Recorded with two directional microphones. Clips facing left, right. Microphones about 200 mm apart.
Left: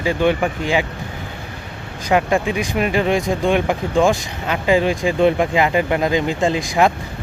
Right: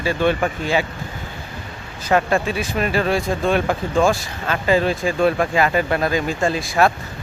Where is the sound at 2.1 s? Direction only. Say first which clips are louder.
Left 1 dB; 15° left (ahead or behind).